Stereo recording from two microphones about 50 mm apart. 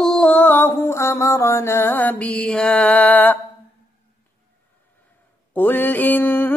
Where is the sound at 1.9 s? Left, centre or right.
Left.